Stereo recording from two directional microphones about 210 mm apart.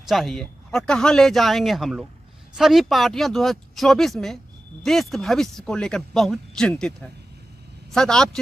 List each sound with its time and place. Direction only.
0.0 s speech: centre (ahead or behind)